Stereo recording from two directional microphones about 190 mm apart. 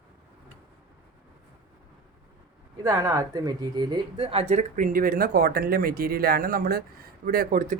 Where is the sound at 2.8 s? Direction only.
15° right (ahead or behind).